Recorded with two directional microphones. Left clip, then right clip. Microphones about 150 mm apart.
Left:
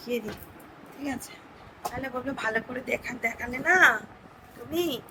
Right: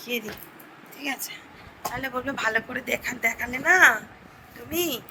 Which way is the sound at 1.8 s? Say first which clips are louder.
Right 3 dB; 5° left (ahead or behind).